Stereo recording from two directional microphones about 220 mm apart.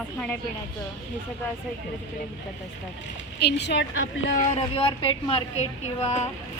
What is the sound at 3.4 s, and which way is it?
Speech, 50° left (ahead or behind).